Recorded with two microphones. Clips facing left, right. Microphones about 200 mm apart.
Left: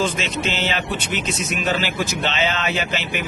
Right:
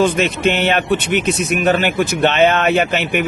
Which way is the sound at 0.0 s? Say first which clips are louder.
Right 8 dB; 60° right (ahead or behind).